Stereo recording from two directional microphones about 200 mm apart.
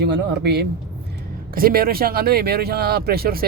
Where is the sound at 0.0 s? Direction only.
55° right (ahead or behind).